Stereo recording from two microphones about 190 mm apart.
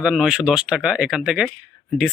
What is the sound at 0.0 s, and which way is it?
Speech, 5° right (ahead or behind).